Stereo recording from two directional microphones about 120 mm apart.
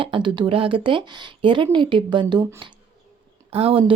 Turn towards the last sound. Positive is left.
turn(degrees=-55)  # may be behind; listen again after turning